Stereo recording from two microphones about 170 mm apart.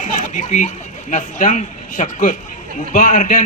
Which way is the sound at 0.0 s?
45° left (ahead or behind).